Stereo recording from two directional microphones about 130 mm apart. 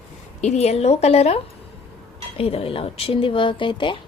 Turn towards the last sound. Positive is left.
turn(degrees=40)  # may be behind; listen again after turning